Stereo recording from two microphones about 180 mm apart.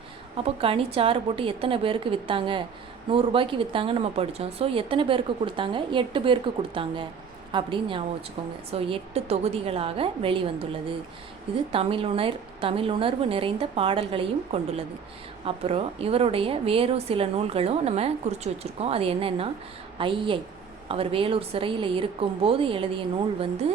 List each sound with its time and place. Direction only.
0.3 s a woman's voice: 30° right (ahead or behind)